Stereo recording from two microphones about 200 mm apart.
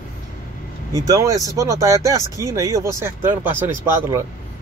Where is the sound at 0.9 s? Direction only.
15° right (ahead or behind).